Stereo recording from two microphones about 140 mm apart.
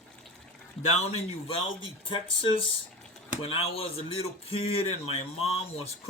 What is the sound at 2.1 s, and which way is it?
Speech, 35° left (ahead or behind).